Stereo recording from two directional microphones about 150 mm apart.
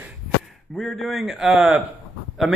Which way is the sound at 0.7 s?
5° left (ahead or behind).